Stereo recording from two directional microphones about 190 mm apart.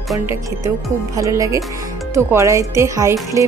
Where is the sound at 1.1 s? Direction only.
15° right (ahead or behind).